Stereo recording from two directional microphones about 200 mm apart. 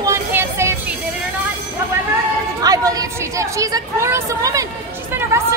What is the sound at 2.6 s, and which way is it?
Chatter, 20° right (ahead or behind).